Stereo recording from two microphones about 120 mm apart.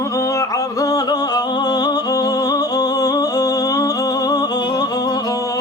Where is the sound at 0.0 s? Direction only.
25° left (ahead or behind).